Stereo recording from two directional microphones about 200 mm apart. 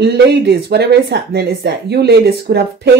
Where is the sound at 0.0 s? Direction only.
55° right (ahead or behind).